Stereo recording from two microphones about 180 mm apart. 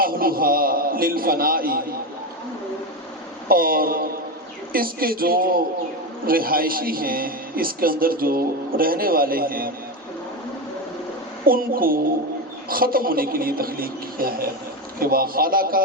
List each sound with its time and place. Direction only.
0.0 s a man's voice: 55° right (ahead or behind)
3.5 s a man's voice: 55° right (ahead or behind)
11.4 s a man's voice: 55° right (ahead or behind)